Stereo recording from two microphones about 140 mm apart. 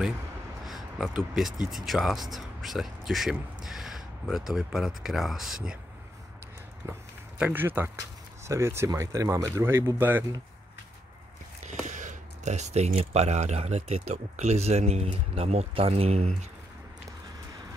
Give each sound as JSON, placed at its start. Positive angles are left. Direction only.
{"t": 0.7, "sound": "a sound", "side_deg": 0}
{"t": 1.3, "sound": "speech", "side_deg": 0}
{"t": 6.9, "sound": "speech", "side_deg": -15}
{"t": 11.6, "sound": "speech", "side_deg": -60}